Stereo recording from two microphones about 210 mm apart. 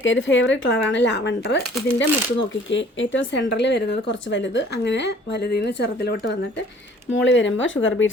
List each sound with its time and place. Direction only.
0.0 s speech: 65° left (ahead or behind)
7.2 s speech: 60° left (ahead or behind)